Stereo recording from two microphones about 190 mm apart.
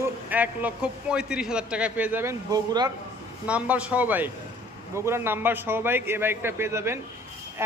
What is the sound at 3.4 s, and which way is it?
Speech, 5° right (ahead or behind).